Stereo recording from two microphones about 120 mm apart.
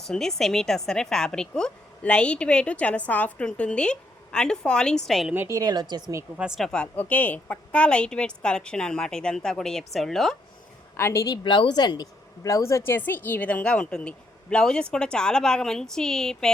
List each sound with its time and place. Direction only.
0.1 s a woman's voice: 5° left (ahead or behind)
5.3 s a woman's voice: 20° right (ahead or behind)
6.3 s speech: 10° right (ahead or behind)
6.7 s a woman's voice: 10° left (ahead or behind)
10.9 s a woman's voice: 20° left (ahead or behind)
11.4 s a woman's voice: 40° left (ahead or behind); by 16.5 s 5° left (ahead or behind)